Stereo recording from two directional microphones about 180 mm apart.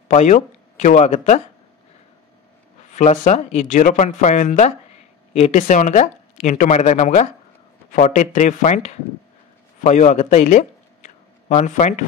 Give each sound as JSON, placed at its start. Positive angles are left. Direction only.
{"t": 0.1, "sound": "speech", "side_deg": 40}
{"t": 3.0, "sound": "speech", "side_deg": 40}